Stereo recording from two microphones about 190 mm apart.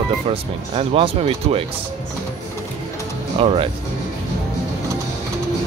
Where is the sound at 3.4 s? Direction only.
30° right (ahead or behind).